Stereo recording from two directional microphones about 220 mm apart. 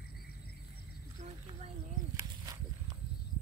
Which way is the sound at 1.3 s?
25° right (ahead or behind).